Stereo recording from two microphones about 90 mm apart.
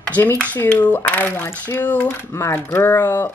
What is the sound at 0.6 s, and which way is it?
A woman's voice, 20° left (ahead or behind).